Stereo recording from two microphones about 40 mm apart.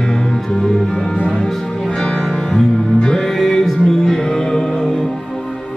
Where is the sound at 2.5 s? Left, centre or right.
Centre.